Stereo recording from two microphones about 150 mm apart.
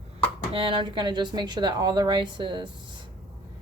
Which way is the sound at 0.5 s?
35° right (ahead or behind).